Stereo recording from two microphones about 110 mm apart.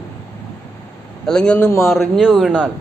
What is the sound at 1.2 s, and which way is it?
Speech, 5° left (ahead or behind).